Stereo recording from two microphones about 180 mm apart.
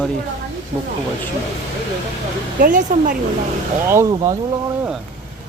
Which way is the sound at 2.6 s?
50° right (ahead or behind).